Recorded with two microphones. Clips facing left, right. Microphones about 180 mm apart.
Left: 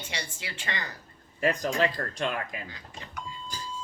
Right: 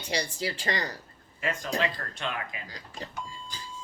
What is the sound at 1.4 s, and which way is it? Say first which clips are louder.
Speech: left 4 dB; 40° left (ahead or behind).